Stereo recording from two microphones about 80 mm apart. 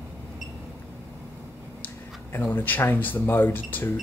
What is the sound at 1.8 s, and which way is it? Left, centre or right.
Speech, left.